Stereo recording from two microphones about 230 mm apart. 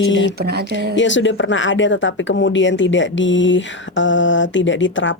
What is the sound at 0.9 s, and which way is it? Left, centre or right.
Speech, left.